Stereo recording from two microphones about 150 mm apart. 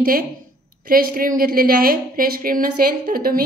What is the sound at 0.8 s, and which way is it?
A woman's voice, 75° right (ahead or behind).